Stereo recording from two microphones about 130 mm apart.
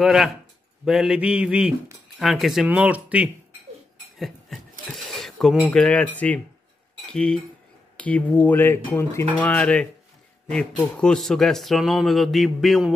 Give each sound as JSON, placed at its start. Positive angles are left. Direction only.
{"t": 0.0, "sound": "speech", "side_deg": -5}
{"t": 4.2, "sound": "a sound", "side_deg": 0}
{"t": 5.7, "sound": "speech", "side_deg": 10}